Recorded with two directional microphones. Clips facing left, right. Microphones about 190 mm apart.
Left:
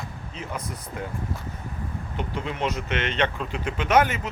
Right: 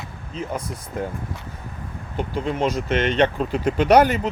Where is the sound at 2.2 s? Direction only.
40° right (ahead or behind).